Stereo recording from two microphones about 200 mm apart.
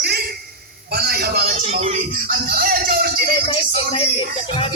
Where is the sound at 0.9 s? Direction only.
50° right (ahead or behind).